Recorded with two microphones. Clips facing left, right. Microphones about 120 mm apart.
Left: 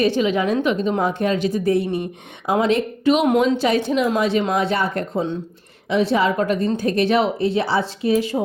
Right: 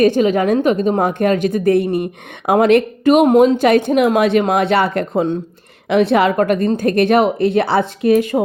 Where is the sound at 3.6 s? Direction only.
55° right (ahead or behind).